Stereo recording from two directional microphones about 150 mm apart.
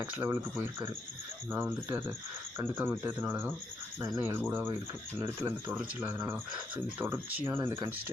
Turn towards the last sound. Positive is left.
turn(degrees=-25)  # may be behind; listen again after turning